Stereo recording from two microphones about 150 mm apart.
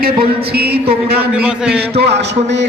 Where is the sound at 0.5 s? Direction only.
90° right.